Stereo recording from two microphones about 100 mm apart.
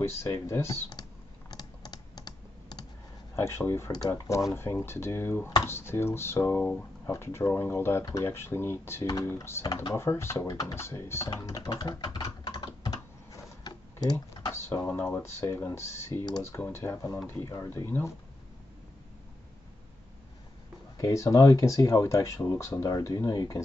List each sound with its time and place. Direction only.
0.0 s speech: 30° left (ahead or behind)
1.5 s computer keyboard: 45° left (ahead or behind)
3.3 s speech: 25° left (ahead or behind)
9.0 s speech: 40° left (ahead or behind)
9.3 s speech: 25° left (ahead or behind)
11.2 s speech: 35° left (ahead or behind)
11.8 s typing: 40° left (ahead or behind)
14.5 s speech: 25° left (ahead or behind)
21.0 s speech: 30° left (ahead or behind)